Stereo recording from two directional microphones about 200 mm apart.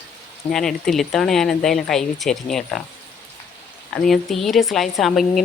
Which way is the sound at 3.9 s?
Centre (ahead or behind).